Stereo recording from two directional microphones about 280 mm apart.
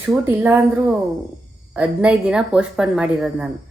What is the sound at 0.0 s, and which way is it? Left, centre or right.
A woman's voice, centre.